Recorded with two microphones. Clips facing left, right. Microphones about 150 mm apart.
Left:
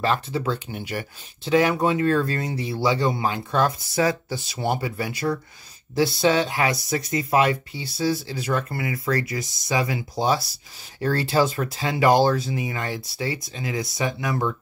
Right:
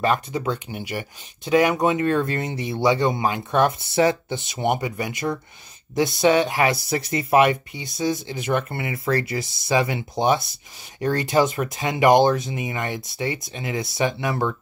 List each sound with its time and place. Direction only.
0.0 s speech: 15° right (ahead or behind)